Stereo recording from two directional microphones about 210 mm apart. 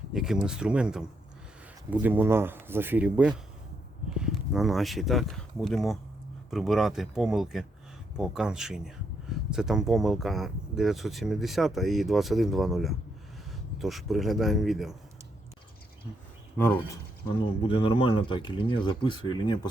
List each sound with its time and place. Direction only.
0.1 s speech: centre (ahead or behind)
17.2 s speech: 25° left (ahead or behind)